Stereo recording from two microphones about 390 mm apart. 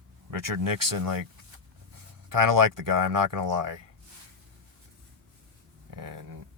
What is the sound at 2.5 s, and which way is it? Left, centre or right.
Speech, right.